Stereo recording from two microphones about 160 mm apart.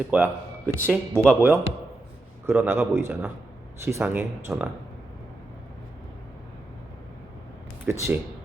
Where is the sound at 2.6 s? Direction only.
15° right (ahead or behind).